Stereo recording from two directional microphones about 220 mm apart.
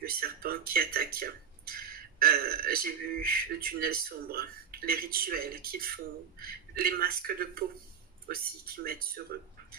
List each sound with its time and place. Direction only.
0.0 s speech: 40° right (ahead or behind)